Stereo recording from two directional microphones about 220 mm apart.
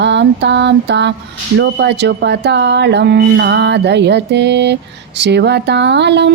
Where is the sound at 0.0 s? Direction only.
55° right (ahead or behind).